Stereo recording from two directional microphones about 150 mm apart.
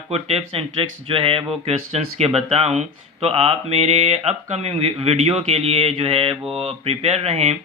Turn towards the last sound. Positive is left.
turn(degrees=-45)  # may be behind; listen again after turning